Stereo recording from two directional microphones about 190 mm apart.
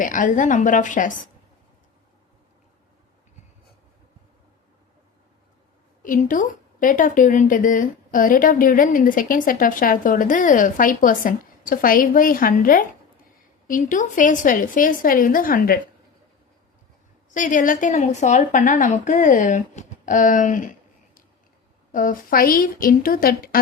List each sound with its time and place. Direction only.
0.0 s a woman's voice: 45° left (ahead or behind)
6.0 s a woman's voice: 45° left (ahead or behind)
17.3 s a woman's voice: 45° left (ahead or behind)
21.9 s a woman's voice: 45° left (ahead or behind)